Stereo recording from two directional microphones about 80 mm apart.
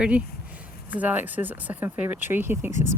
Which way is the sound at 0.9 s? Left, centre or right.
Right.